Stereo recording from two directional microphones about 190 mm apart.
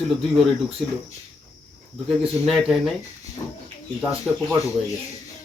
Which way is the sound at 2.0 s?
Centre (ahead or behind).